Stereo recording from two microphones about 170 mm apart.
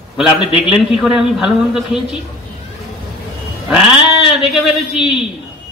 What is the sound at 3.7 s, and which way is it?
A man's voice, 5° right (ahead or behind).